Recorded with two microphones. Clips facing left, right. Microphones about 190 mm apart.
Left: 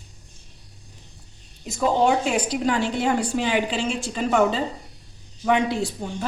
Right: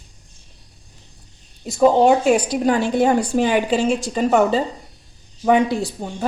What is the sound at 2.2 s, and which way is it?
A woman's voice, 40° right (ahead or behind).